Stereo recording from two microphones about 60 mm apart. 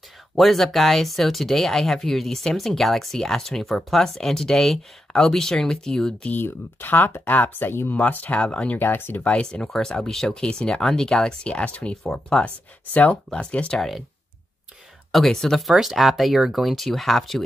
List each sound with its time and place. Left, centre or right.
0.4 s speech: centre
6.2 s speech: left
7.9 s speech: left
8.7 s speech: left
9.3 s speech: centre
12.9 s speech: left
13.7 s speech: centre
15.0 s speech: centre